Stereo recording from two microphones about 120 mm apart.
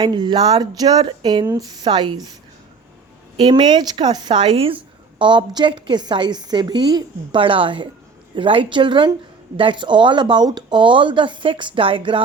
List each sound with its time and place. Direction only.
0.0 s a woman's voice: 40° right (ahead or behind)
3.3 s a woman's voice: 40° right (ahead or behind)
5.2 s a woman's voice: 40° right (ahead or behind)